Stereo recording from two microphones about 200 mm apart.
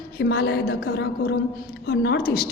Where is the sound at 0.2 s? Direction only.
55° left (ahead or behind).